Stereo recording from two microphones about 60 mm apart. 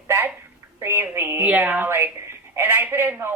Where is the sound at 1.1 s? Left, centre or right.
Right.